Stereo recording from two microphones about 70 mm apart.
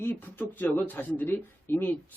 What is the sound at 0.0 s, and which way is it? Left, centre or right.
Speech, left.